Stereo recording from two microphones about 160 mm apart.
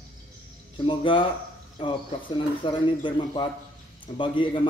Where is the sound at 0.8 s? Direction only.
30° left (ahead or behind).